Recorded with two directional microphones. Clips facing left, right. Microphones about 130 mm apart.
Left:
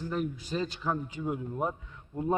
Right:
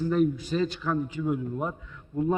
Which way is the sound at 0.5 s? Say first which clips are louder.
Right 5 dB; 25° left (ahead or behind).